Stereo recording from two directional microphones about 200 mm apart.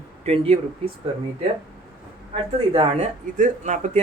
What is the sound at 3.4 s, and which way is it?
Speech, 40° right (ahead or behind).